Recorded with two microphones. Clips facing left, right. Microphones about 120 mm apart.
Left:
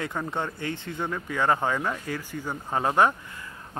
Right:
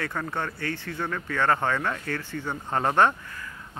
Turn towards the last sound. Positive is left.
turn(degrees=20)  # may be behind; listen again after turning